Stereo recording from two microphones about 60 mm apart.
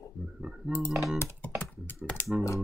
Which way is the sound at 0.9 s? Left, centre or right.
Centre.